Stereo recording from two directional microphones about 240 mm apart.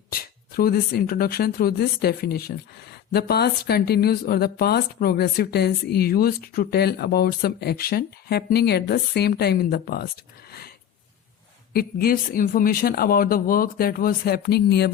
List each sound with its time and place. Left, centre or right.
0.1 s speech: left
11.7 s speech: left